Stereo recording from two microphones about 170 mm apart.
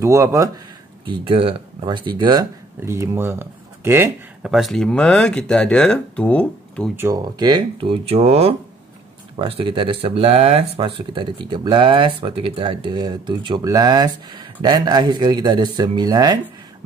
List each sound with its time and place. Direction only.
0.0 s speech: 15° right (ahead or behind)
1.0 s speech: 30° right (ahead or behind)
2.8 s speech: 15° right (ahead or behind)
4.5 s speech: centre (ahead or behind)
7.0 s speech: 20° right (ahead or behind)